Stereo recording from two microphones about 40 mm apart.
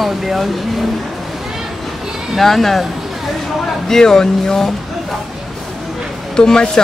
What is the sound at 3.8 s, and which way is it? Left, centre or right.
Speech, centre.